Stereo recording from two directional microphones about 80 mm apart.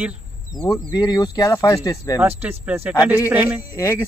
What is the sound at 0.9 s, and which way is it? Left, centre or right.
Speech, left.